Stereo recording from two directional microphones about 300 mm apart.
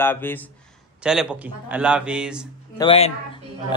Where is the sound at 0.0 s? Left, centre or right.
Centre.